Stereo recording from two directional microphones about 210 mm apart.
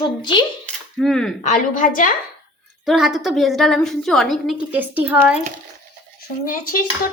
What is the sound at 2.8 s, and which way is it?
A woman's voice, centre (ahead or behind).